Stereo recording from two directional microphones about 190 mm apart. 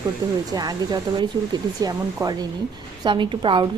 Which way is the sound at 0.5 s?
20° right (ahead or behind).